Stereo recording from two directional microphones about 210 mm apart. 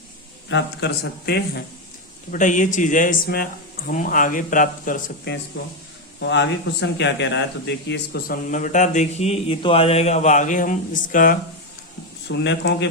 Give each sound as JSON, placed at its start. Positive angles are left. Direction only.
{"t": 0.4, "sound": "a man's voice", "side_deg": 55}
{"t": 2.3, "sound": "speech", "side_deg": 35}
{"t": 6.1, "sound": "speech", "side_deg": 60}
{"t": 12.3, "sound": "speech", "side_deg": 55}